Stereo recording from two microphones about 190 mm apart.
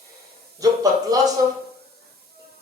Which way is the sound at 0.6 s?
20° right (ahead or behind).